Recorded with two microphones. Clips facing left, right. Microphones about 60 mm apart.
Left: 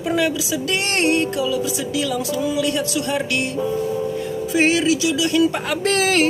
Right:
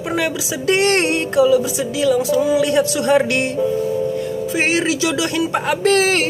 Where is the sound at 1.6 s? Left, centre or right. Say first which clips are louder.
Right 5 dB; centre.